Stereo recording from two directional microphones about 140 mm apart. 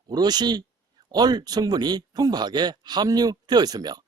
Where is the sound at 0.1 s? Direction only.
30° right (ahead or behind).